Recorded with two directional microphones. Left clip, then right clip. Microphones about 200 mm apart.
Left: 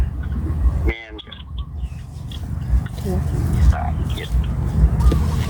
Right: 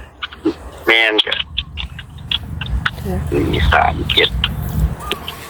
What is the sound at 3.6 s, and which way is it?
Speech, 40° right (ahead or behind).